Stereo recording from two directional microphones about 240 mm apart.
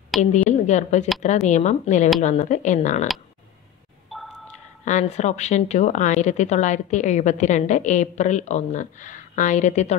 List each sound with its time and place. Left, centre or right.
0.1 s a woman's voice: centre
0.5 s a woman's voice: left
4.1 s a sound: centre
4.8 s speech: left